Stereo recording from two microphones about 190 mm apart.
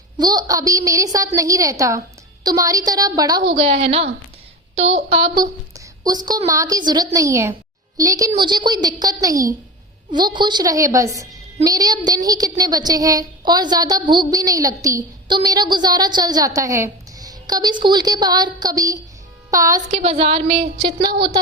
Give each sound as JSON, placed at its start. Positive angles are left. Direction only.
{"t": 0.2, "sound": "a woman's voice", "side_deg": -20}
{"t": 3.4, "sound": "a woman's voice", "side_deg": -30}
{"t": 20.0, "sound": "a woman's voice", "side_deg": -30}